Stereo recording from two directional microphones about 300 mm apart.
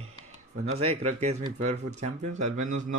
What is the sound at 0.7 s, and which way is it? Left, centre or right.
Speech, right.